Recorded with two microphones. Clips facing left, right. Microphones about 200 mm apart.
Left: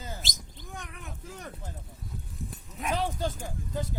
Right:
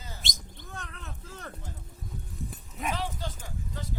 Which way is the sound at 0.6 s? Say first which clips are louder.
Left 1 dB; 15° left (ahead or behind).